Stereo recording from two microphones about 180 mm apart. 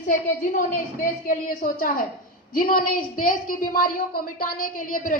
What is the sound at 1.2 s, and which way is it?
A woman's voice, 50° left (ahead or behind).